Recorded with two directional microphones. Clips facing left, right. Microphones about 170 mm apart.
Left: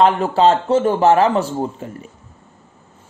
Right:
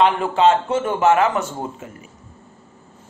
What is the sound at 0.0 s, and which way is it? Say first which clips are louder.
Speech: left 2 dB; 40° left (ahead or behind).